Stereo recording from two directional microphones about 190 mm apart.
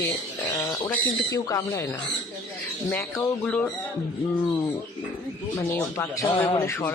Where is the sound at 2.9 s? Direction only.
10° left (ahead or behind).